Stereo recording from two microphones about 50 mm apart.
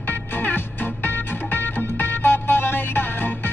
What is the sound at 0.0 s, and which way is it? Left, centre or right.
Music, left.